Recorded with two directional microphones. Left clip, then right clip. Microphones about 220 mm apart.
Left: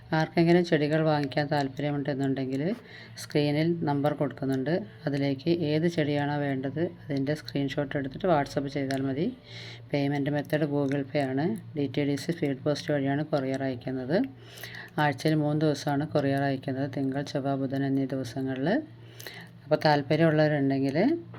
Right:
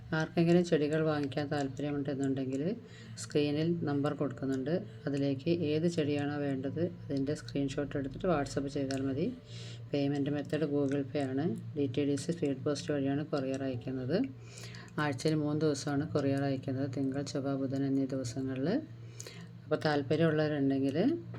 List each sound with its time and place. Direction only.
0.1 s speech: 15° left (ahead or behind)
19.9 s speech: 15° left (ahead or behind)